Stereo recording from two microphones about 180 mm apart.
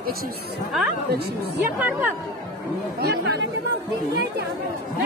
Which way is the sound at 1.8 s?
10° right (ahead or behind).